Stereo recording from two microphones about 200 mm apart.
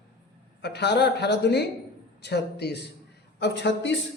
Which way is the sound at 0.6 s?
55° left (ahead or behind).